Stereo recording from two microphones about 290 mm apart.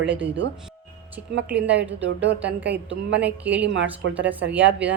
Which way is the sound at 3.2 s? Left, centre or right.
Centre.